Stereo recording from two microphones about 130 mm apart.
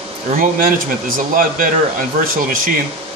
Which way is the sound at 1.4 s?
90° right.